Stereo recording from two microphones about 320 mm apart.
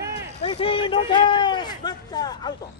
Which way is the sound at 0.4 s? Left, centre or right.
Centre.